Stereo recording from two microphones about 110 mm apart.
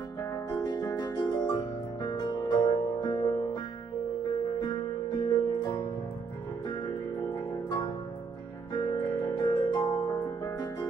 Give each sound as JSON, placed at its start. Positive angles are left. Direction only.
{"t": 0.5, "sound": "music", "side_deg": 40}
{"t": 4.6, "sound": "music", "side_deg": 40}
{"t": 8.7, "sound": "music", "side_deg": 40}